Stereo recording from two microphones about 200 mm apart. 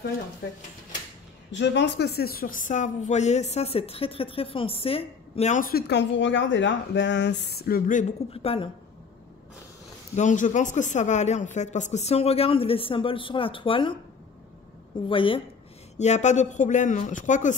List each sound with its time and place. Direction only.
1.5 s speech: 60° left (ahead or behind); by 8.6 s 30° left (ahead or behind)
10.1 s speech: 40° left (ahead or behind)
15.0 s a woman's voice: 25° left (ahead or behind)